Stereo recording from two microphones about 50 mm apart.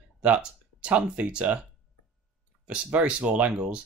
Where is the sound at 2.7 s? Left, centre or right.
Right.